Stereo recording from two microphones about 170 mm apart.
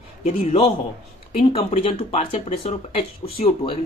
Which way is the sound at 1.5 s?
35° left (ahead or behind).